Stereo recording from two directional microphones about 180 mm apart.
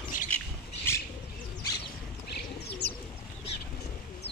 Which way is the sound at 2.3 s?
65° left (ahead or behind).